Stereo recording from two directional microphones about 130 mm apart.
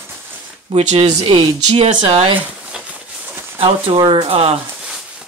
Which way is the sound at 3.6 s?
40° right (ahead or behind).